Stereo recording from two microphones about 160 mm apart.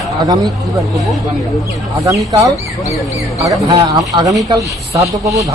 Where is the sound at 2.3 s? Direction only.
20° right (ahead or behind).